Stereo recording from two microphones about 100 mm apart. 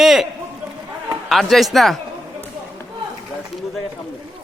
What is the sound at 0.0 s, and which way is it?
Run, 5° right (ahead or behind).